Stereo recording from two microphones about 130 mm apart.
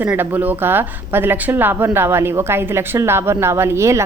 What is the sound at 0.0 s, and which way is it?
Speech, 15° right (ahead or behind).